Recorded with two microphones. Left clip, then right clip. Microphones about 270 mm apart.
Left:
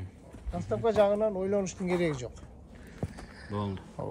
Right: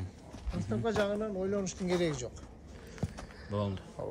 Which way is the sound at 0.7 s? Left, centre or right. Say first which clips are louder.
Left 7 dB; centre.